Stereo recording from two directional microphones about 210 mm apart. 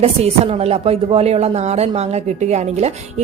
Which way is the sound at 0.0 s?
30° right (ahead or behind).